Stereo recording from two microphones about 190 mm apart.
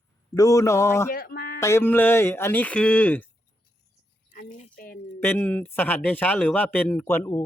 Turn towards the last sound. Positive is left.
turn(degrees=10)  # may be behind; listen again after turning